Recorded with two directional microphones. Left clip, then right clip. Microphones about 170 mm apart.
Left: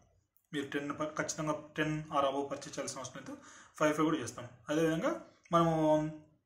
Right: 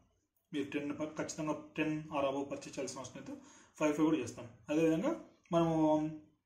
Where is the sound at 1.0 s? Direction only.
5° right (ahead or behind).